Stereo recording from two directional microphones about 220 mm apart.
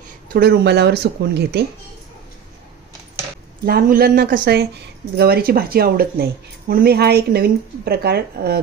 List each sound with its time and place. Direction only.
0.3 s speech: 50° right (ahead or behind)
3.6 s speech: 40° right (ahead or behind)